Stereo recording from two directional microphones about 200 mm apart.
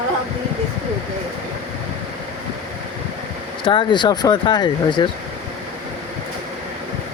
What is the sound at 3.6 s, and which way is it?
Speech, 25° left (ahead or behind).